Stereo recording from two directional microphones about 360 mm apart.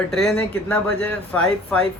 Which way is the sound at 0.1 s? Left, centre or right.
Centre.